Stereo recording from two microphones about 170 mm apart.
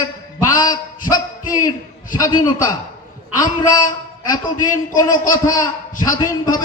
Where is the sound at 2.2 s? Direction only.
25° left (ahead or behind).